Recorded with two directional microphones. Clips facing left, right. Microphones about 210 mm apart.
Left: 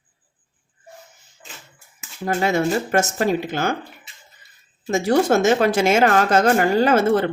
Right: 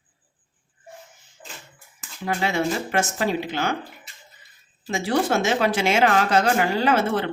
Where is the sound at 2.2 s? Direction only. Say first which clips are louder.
Left 4 dB; 45° left (ahead or behind).